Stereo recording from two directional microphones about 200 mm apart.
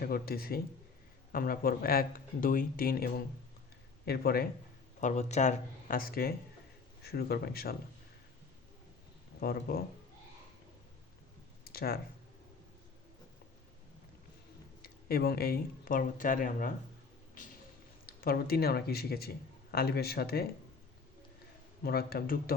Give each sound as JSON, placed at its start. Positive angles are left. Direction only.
{"t": 0.0, "sound": "speech", "side_deg": 50}
{"t": 4.9, "sound": "speech", "side_deg": 35}
{"t": 9.4, "sound": "speech", "side_deg": 50}
{"t": 11.6, "sound": "a sound", "side_deg": 50}
{"t": 14.8, "sound": "speech", "side_deg": 50}
{"t": 18.0, "sound": "speech", "side_deg": 50}
{"t": 21.8, "sound": "speech", "side_deg": 50}